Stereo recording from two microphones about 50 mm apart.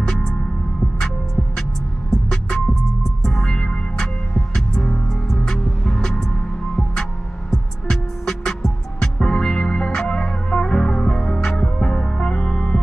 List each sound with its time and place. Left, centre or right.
0.0 s music: centre
2.3 s music: centre
7.9 s music: centre